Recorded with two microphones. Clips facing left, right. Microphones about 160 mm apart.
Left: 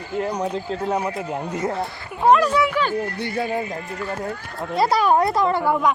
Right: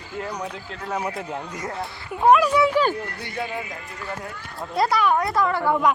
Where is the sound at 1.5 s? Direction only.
25° left (ahead or behind).